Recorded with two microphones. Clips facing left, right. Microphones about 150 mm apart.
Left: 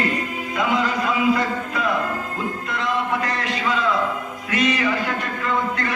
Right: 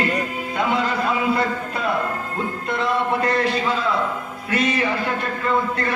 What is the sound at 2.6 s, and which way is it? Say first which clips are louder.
Music: right 3 dB; 30° right (ahead or behind).